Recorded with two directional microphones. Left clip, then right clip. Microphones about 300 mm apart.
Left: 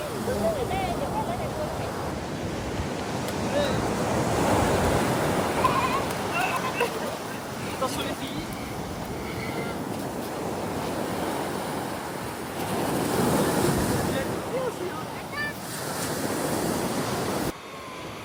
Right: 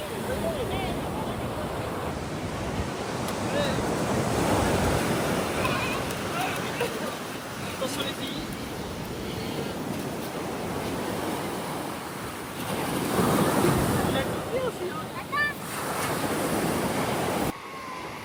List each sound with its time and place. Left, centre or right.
4.4 s waves: left
13.2 s waves: centre
16.0 s vehicle: centre